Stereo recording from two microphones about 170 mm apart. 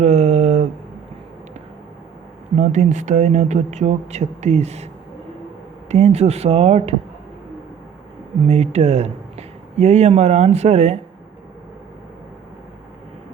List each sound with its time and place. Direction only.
0.0 s a sound: 40° right (ahead or behind)
2.6 s speech: 45° right (ahead or behind)
5.9 s speech: 40° right (ahead or behind)
8.4 s speech: 40° right (ahead or behind)